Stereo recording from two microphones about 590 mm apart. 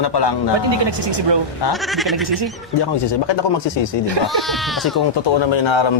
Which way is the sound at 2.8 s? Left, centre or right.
Left.